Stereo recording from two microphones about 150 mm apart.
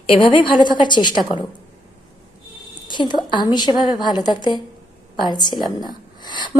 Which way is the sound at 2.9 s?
30° left (ahead or behind).